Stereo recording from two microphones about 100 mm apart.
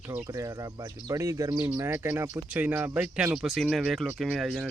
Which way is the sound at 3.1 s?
5° right (ahead or behind).